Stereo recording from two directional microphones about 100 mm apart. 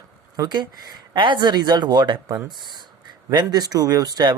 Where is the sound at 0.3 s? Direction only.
45° right (ahead or behind).